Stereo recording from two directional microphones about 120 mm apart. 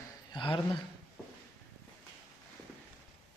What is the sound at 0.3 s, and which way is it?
Speech, 45° left (ahead or behind).